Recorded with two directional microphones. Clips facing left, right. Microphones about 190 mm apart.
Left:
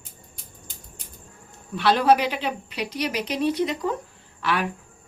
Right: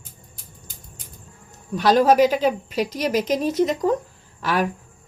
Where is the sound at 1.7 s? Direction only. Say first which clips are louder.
Right 3 dB; 40° right (ahead or behind).